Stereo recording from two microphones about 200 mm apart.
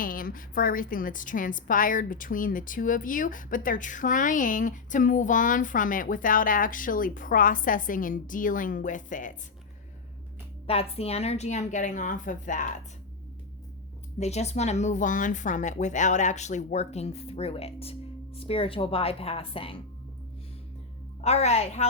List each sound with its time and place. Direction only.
0.0 s a woman's voice: 45° left (ahead or behind)
10.7 s a woman's voice: 30° left (ahead or behind)
14.2 s a woman's voice: 35° left (ahead or behind)
21.2 s a woman's voice: 30° left (ahead or behind)